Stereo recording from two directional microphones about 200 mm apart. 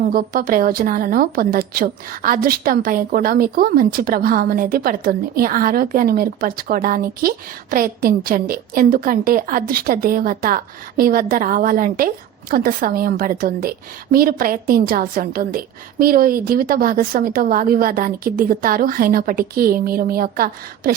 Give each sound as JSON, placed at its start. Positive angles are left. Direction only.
{"t": 0.1, "sound": "a woman's voice", "side_deg": -45}